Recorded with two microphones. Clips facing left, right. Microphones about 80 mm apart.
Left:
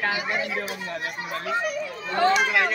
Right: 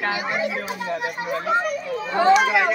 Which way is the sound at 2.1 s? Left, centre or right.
Centre.